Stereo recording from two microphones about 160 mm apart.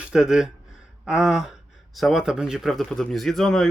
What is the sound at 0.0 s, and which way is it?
Speech, 5° right (ahead or behind).